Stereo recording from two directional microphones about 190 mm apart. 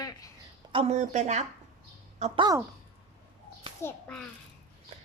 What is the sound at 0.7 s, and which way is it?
Speech, 30° right (ahead or behind).